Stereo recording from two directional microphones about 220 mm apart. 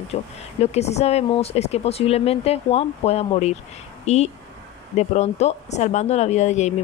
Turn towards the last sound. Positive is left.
turn(degrees=30)  # may be behind; listen again after turning